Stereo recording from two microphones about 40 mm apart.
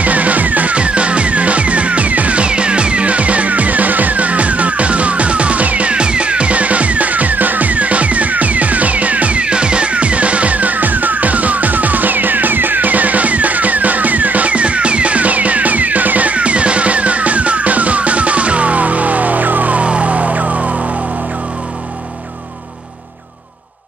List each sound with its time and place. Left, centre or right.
0.0 s music: right